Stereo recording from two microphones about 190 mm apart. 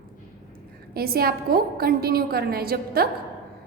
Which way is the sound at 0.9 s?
50° right (ahead or behind).